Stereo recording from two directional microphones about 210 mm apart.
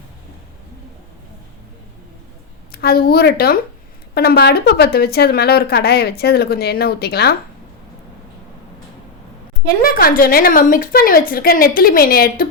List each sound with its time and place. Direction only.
2.7 s a woman's voice: 45° left (ahead or behind)
9.8 s a woman's voice: 45° left (ahead or behind)